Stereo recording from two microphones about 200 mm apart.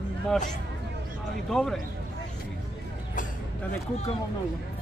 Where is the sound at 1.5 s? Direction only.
Centre (ahead or behind).